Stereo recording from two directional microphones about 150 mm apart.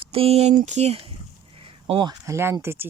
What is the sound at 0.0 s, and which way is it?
Speech, 40° right (ahead or behind).